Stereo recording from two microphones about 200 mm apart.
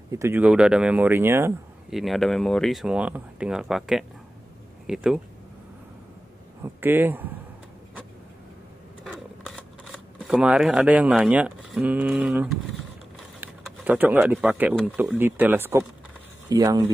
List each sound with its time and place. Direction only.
0.1 s speech: 10° right (ahead or behind)
1.9 s speech: centre (ahead or behind)
6.6 s speech: 10° right (ahead or behind)
9.0 s camera: centre (ahead or behind)
13.7 s speech: 10° right (ahead or behind)